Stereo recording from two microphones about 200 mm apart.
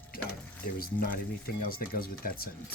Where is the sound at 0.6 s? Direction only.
45° left (ahead or behind).